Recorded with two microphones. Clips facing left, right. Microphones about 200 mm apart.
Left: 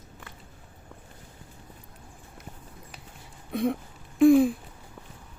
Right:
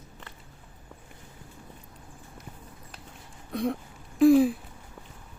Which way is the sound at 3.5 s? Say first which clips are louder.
Left 2 dB; centre (ahead or behind).